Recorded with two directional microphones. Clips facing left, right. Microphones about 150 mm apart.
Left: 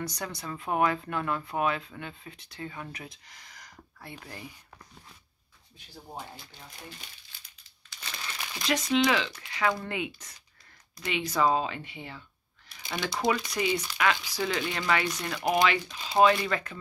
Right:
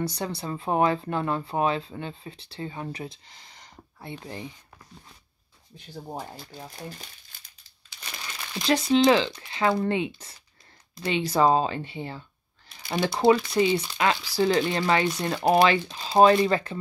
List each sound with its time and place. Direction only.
0.0 s speech: 30° right (ahead or behind)
8.5 s speech: 30° right (ahead or behind)